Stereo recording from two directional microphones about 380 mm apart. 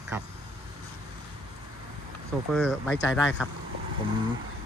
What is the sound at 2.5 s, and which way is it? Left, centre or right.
Speech, centre.